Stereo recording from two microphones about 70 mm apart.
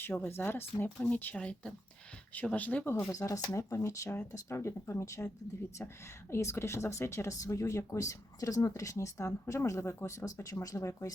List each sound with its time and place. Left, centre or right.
0.0 s speech: left
2.9 s speech: left
6.3 s speech: left